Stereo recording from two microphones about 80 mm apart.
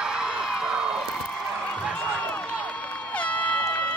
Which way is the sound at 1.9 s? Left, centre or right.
Centre.